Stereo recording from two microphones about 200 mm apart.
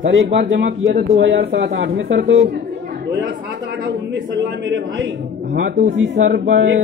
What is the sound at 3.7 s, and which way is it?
A man's voice, 60° right (ahead or behind).